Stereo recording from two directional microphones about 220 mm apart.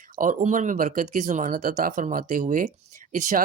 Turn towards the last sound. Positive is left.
turn(degrees=-35)  # may be behind; listen again after turning